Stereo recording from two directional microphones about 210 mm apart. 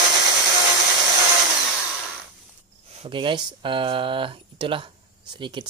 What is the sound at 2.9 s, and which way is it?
Speech, 25° right (ahead or behind).